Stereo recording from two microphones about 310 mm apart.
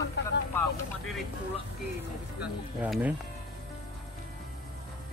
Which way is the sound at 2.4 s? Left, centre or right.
Centre.